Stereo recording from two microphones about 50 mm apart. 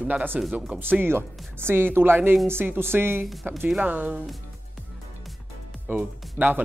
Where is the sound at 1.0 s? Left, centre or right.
Right.